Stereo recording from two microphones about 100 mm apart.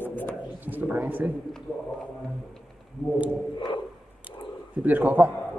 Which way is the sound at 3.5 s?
55° left (ahead or behind).